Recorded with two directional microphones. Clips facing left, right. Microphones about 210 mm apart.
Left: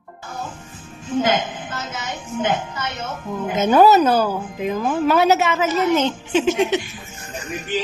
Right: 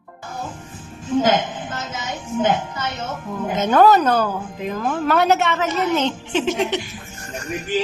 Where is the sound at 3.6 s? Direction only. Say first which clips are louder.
Left 1 dB; 10° left (ahead or behind).